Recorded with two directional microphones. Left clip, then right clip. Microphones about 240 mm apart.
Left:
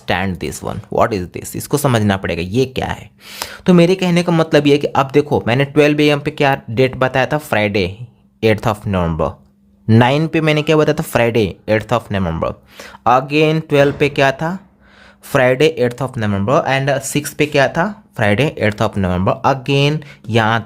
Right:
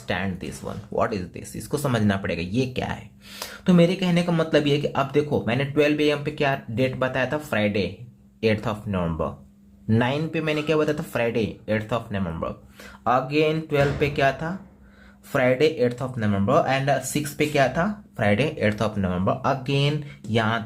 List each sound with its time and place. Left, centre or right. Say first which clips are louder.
0.0 s speech: left 9 dB; left